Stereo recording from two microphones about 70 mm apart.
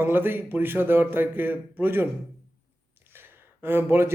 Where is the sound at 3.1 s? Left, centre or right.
Right.